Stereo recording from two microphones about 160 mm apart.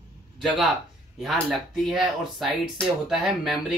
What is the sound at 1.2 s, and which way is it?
Speech, centre (ahead or behind).